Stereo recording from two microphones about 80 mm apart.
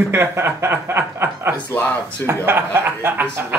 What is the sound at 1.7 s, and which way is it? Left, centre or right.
Speech, left.